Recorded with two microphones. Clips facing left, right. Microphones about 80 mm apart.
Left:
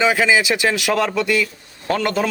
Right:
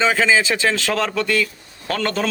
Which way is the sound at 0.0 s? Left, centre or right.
Centre.